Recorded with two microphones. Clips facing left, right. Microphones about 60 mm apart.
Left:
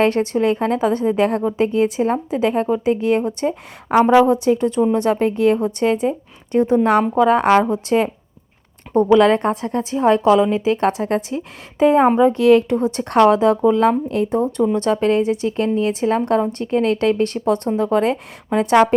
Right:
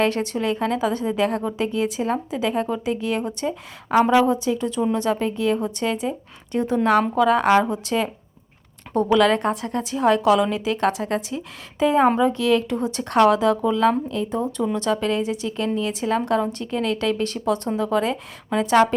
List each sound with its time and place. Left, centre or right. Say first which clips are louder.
0.0 s a woman's voice: left 5 dB; left